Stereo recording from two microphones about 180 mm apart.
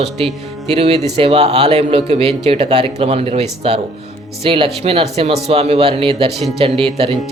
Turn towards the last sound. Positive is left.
turn(degrees=-30)  # may be behind; listen again after turning